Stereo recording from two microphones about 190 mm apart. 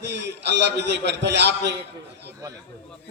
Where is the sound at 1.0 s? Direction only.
65° right (ahead or behind).